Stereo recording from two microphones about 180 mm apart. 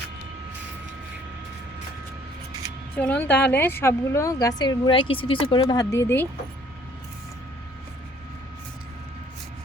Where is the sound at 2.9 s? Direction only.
10° left (ahead or behind).